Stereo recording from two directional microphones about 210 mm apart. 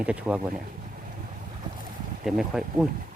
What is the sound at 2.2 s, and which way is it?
Speech, centre (ahead or behind).